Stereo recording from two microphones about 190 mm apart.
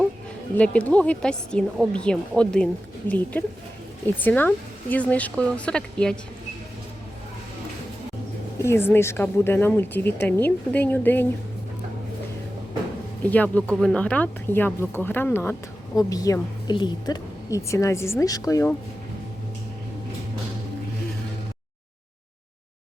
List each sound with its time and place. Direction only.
0.5 s speech: 5° left (ahead or behind)
4.0 s a woman's voice: 10° left (ahead or behind)
8.6 s a woman's voice: 15° left (ahead or behind)
13.2 s a woman's voice: 10° left (ahead or behind)